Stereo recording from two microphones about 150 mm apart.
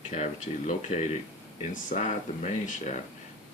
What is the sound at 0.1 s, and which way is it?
Speech, 55° left (ahead or behind).